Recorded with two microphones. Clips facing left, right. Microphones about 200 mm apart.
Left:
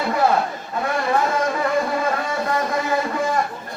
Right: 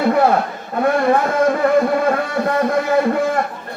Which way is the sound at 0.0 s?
55° right (ahead or behind).